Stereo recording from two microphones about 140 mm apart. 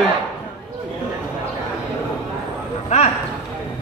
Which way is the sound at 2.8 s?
55° left (ahead or behind).